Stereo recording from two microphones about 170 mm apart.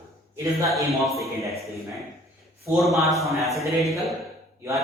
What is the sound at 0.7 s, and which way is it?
Speech, centre (ahead or behind).